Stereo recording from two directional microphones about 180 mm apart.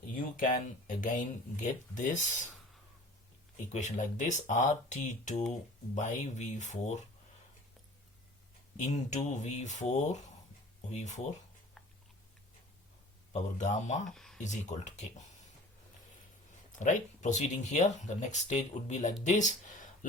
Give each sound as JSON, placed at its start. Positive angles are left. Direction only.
{"t": 0.1, "sound": "speech", "side_deg": 50}
{"t": 3.7, "sound": "speech", "side_deg": 40}
{"t": 8.8, "sound": "speech", "side_deg": 40}
{"t": 13.3, "sound": "speech", "side_deg": 40}
{"t": 14.2, "sound": "a sound", "side_deg": 0}
{"t": 14.4, "sound": "speech", "side_deg": 40}
{"t": 16.7, "sound": "speech", "side_deg": 45}